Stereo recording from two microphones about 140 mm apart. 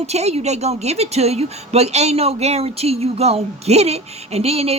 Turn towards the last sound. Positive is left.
turn(degrees=-45)  # may be behind; listen again after turning